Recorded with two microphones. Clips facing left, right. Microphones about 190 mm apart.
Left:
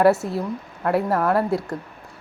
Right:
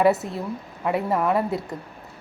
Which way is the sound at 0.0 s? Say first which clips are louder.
Left 3 dB; centre (ahead or behind).